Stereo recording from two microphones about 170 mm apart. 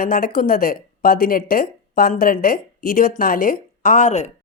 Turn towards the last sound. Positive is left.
turn(degrees=45)  # may be behind; listen again after turning